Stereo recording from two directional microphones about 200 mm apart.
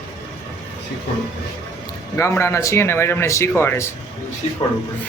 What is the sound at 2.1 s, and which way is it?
A man's voice, 15° left (ahead or behind).